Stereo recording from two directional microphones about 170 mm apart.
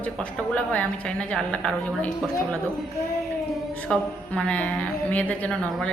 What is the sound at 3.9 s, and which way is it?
Speech, 5° left (ahead or behind).